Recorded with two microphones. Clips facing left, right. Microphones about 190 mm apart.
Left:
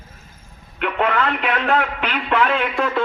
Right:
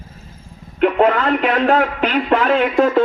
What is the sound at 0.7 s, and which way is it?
A man's voice, 40° right (ahead or behind).